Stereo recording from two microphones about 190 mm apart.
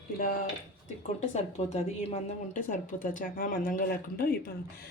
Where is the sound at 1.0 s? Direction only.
35° left (ahead or behind).